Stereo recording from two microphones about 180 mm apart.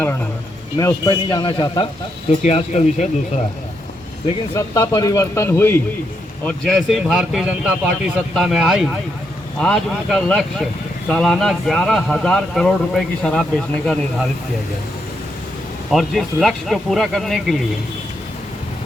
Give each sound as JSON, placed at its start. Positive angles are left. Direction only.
{"t": 0.8, "sound": "a man's voice", "side_deg": 20}
{"t": 2.4, "sound": "speech", "side_deg": 40}
{"t": 4.5, "sound": "speech", "side_deg": 15}
{"t": 15.9, "sound": "speech", "side_deg": 0}